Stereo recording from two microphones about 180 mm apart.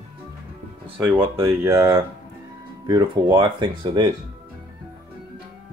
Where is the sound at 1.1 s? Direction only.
10° right (ahead or behind).